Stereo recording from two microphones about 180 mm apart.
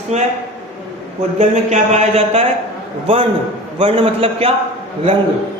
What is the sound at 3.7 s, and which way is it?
Speech, 30° right (ahead or behind).